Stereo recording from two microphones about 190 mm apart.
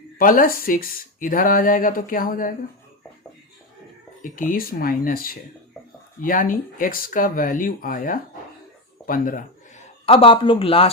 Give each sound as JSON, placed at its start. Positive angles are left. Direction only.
{"t": 0.2, "sound": "speech", "side_deg": 45}
{"t": 4.2, "sound": "speech", "side_deg": 45}
{"t": 9.0, "sound": "a sound", "side_deg": 45}
{"t": 10.1, "sound": "a man's voice", "side_deg": 30}